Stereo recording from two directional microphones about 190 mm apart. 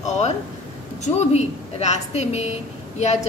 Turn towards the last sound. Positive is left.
turn(degrees=35)  # may be behind; listen again after turning